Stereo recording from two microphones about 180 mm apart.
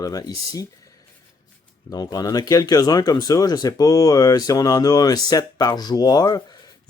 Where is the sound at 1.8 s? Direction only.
20° left (ahead or behind).